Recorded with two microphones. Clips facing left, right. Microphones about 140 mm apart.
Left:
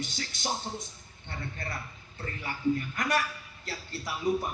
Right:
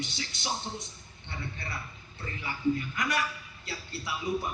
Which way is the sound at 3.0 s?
45° left (ahead or behind).